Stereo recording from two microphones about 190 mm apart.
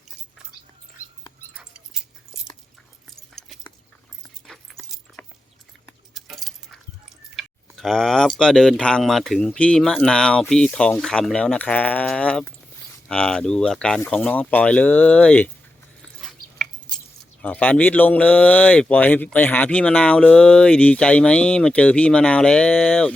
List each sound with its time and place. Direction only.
1.5 s a sound: 5° right (ahead or behind)
6.1 s keys jangling: centre (ahead or behind)
7.3 s speech: centre (ahead or behind)
16.2 s squish: centre (ahead or behind)
17.4 s speech: 5° left (ahead or behind)